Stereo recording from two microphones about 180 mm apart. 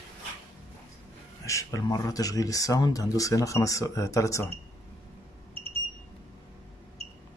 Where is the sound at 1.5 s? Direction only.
20° left (ahead or behind).